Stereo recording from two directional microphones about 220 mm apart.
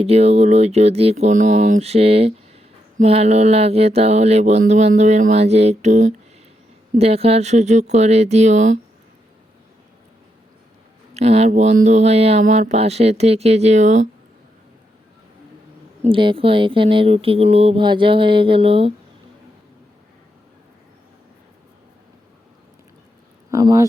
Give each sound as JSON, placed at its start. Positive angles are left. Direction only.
{"t": 0.0, "sound": "speech", "side_deg": -30}
{"t": 11.1, "sound": "speech", "side_deg": -30}
{"t": 16.0, "sound": "speech", "side_deg": -25}
{"t": 23.5, "sound": "speech", "side_deg": -15}